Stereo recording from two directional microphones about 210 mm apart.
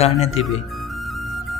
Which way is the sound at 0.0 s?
30° left (ahead or behind).